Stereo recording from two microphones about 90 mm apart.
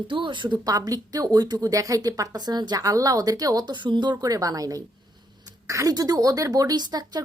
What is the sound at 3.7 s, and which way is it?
A woman's voice, 60° right (ahead or behind).